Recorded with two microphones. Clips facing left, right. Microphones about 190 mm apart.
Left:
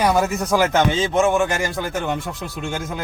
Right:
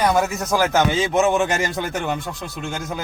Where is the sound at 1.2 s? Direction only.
20° right (ahead or behind).